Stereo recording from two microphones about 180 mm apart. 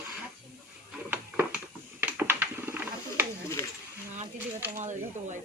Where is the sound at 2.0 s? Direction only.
10° right (ahead or behind).